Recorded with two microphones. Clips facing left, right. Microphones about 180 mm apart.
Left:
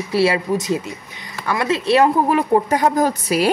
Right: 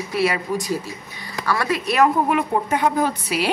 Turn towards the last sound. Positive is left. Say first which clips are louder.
# left 5 dB
turn(degrees=45)  # may be behind; listen again after turning